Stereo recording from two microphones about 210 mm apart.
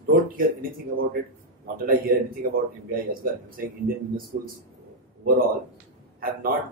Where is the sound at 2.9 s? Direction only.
45° right (ahead or behind).